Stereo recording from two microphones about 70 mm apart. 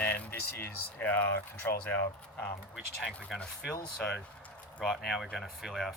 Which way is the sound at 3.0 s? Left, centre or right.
Centre.